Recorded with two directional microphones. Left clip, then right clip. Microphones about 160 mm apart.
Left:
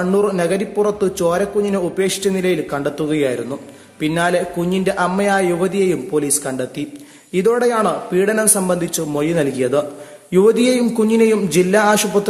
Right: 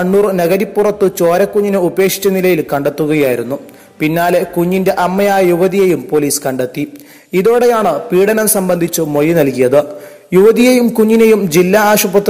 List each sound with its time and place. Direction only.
0.2 s a man's voice: 35° right (ahead or behind)